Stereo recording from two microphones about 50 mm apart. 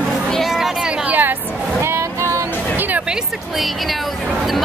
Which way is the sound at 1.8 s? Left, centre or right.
Right.